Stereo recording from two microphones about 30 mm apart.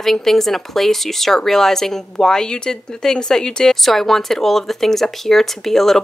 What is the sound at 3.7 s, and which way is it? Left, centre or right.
Speech, centre.